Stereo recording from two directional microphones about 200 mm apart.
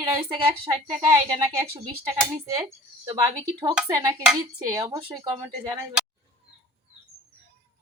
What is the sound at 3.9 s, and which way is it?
A woman's voice, 20° right (ahead or behind).